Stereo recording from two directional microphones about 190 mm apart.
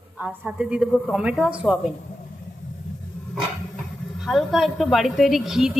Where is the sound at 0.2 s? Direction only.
5° right (ahead or behind).